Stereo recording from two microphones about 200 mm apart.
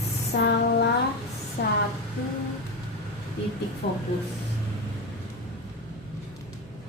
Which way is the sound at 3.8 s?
50° left (ahead or behind).